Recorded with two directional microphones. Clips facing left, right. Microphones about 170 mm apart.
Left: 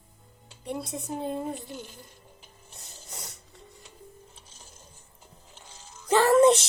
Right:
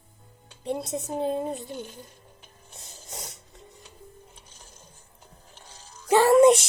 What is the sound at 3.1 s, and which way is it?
Ratchet, 20° right (ahead or behind).